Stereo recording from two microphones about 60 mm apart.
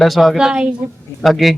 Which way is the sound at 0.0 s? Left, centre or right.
Centre.